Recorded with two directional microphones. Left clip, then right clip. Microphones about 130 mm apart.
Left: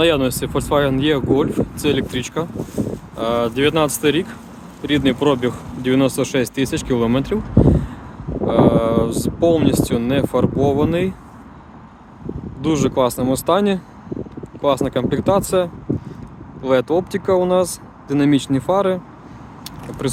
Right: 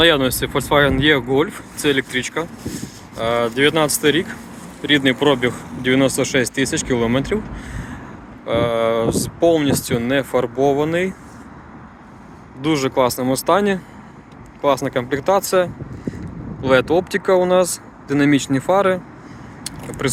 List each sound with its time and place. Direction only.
0.0 s speech: 50° left (ahead or behind)
12.6 s speech: 50° left (ahead or behind)
20.0 s speech: 45° left (ahead or behind)